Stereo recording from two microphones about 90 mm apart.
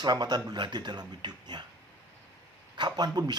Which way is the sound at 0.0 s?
50° right (ahead or behind).